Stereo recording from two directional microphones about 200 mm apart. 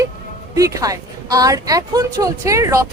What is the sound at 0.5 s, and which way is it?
A woman's voice, 15° right (ahead or behind).